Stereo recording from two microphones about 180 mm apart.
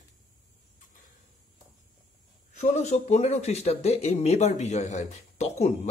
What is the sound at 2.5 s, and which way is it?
Speech, 40° left (ahead or behind).